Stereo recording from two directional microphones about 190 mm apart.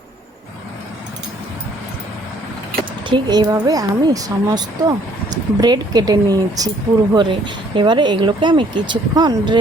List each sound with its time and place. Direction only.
3.1 s speech: 20° right (ahead or behind)